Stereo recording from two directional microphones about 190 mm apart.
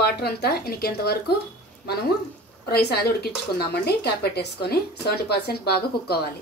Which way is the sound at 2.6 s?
60° left (ahead or behind).